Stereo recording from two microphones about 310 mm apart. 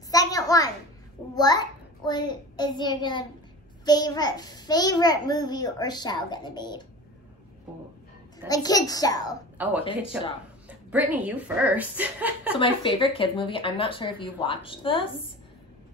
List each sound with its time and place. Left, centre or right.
0.1 s a sound: centre
1.3 s a child's voice: centre
8.5 s a child's voice: centre
10.7 s a woman's voice: centre
12.5 s a child's voice: centre